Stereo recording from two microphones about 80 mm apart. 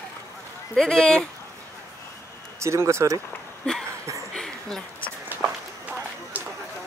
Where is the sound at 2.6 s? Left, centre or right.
Right.